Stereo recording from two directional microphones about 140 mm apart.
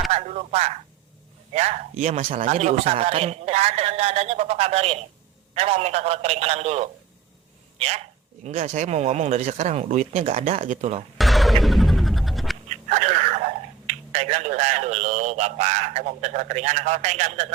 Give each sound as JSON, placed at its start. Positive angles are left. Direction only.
{"t": 0.1, "sound": "a man's voice", "side_deg": -50}
{"t": 11.2, "sound": "music", "side_deg": 0}
{"t": 12.6, "sound": "speech", "side_deg": -55}